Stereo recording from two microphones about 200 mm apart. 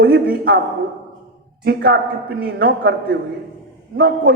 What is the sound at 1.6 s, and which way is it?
A man's voice, 50° right (ahead or behind).